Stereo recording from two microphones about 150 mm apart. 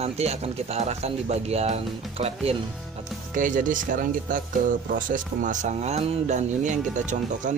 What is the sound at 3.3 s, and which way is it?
Speech, 60° right (ahead or behind).